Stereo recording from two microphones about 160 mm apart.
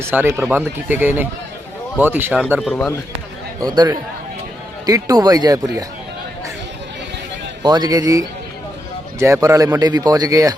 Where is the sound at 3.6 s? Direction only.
25° right (ahead or behind).